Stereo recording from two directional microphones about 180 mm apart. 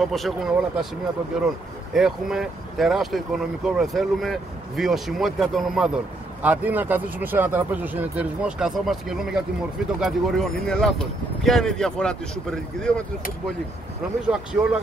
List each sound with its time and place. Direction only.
0.0 s speech: centre (ahead or behind)
14.3 s speech: 5° right (ahead or behind)